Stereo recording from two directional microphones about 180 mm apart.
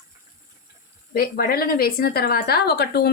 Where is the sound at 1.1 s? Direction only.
55° left (ahead or behind).